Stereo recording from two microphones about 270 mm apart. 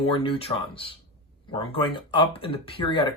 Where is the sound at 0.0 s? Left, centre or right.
Centre.